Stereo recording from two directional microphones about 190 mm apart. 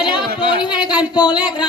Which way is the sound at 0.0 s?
25° left (ahead or behind).